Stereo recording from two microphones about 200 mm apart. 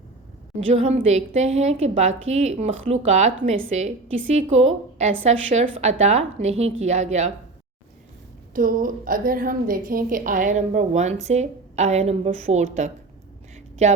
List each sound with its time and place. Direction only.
0.7 s a woman's voice: 30° right (ahead or behind)
8.5 s a woman's voice: 45° right (ahead or behind)